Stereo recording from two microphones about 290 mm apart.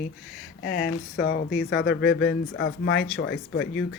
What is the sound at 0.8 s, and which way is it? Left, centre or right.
Speech, left.